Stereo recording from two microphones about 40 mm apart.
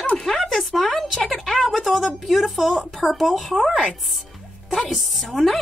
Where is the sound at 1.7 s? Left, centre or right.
Centre.